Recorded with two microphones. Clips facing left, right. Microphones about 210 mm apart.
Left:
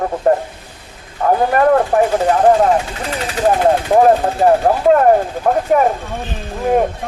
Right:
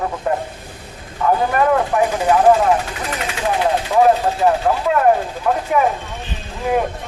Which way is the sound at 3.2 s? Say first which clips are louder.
Left 6 dB; 40° left (ahead or behind).